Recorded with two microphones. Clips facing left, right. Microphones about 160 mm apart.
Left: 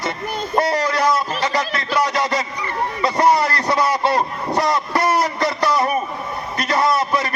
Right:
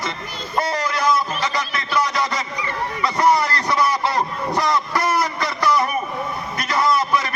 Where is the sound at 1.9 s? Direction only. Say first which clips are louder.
Left 2 dB; 30° left (ahead or behind).